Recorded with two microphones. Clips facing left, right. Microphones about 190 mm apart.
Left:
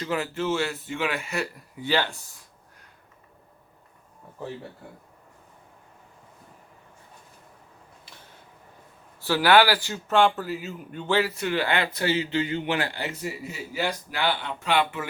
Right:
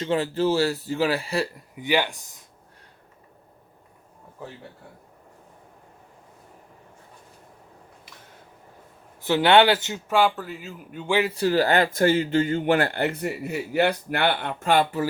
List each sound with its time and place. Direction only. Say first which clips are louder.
0.0 s a man's voice: right 5 dB; 30° right (ahead or behind)
1.7 s speech: right 2 dB; 15° right (ahead or behind)
9.2 s speech: right 2 dB; 20° right (ahead or behind)
10.1 s speech: left 1 dB; 5° right (ahead or behind)
11.3 s speech: right 5 dB; 35° right (ahead or behind)